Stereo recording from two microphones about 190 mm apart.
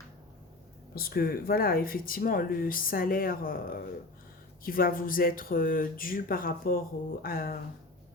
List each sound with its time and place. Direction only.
0.9 s speech: 50° left (ahead or behind)